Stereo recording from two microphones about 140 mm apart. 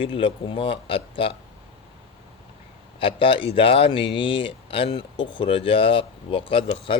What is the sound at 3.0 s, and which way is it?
Speech, 40° left (ahead or behind).